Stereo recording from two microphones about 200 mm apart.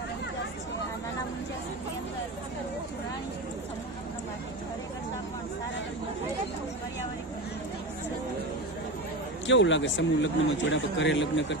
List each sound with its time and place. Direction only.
9.5 s a man's voice: 65° left (ahead or behind)